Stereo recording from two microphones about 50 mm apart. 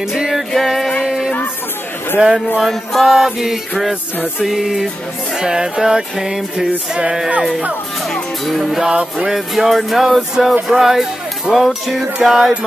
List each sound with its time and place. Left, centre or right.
0.0 s music: centre
1.0 s music: centre
2.6 s music: centre; by 7.4 s right
8.1 s music: centre
8.8 s music: centre
9.6 s music: centre